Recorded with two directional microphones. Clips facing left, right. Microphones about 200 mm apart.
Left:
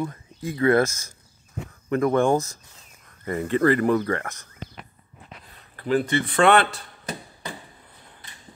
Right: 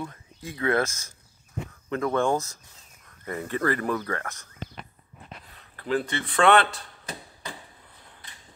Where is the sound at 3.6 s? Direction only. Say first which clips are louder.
Left 7 dB; 20° left (ahead or behind).